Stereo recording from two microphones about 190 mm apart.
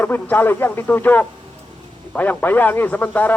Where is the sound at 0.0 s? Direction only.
10° left (ahead or behind).